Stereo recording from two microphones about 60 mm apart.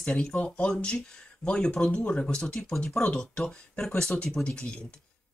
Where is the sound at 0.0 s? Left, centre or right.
Centre.